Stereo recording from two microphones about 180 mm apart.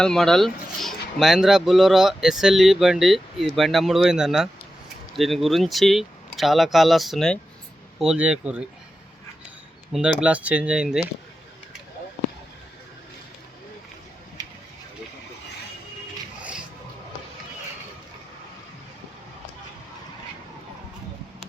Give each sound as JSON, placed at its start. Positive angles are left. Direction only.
{"t": 0.0, "sound": "speech", "side_deg": 5}
{"t": 9.9, "sound": "speech", "side_deg": -5}
{"t": 14.4, "sound": "a sound", "side_deg": -20}